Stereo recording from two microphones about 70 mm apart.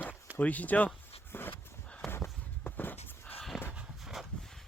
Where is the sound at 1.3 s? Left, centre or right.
Left.